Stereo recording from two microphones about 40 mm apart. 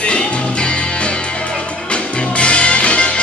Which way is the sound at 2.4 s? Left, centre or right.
Left.